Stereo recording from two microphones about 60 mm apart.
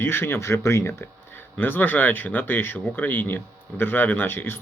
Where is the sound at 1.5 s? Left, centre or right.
Left.